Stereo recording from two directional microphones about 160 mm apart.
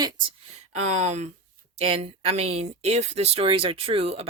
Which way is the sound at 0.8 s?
45° right (ahead or behind).